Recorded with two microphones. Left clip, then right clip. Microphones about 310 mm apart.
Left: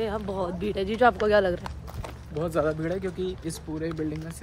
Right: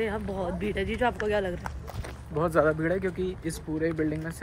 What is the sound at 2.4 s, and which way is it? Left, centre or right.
Speech, centre.